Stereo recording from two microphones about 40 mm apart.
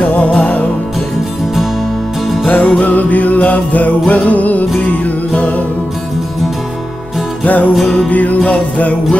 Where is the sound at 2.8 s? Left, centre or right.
Left.